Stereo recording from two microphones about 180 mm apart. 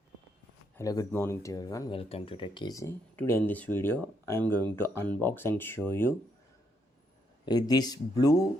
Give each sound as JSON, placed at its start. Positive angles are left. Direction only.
{"t": 0.8, "sound": "speech", "side_deg": 20}
{"t": 1.9, "sound": "speech", "side_deg": 30}
{"t": 7.4, "sound": "speech", "side_deg": 20}